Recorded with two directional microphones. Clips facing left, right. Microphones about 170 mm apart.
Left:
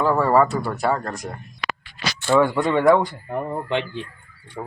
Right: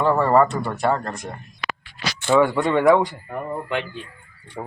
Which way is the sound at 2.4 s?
5° right (ahead or behind).